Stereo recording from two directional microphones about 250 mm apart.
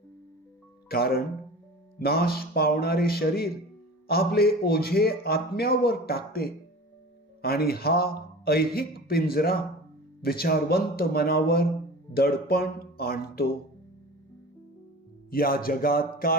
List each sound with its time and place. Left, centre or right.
0.9 s a man's voice: left
15.3 s a man's voice: left